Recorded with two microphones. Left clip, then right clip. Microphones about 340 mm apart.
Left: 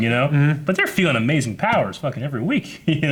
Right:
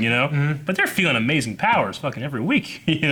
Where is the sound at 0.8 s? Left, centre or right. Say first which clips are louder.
Right 1 dB; left.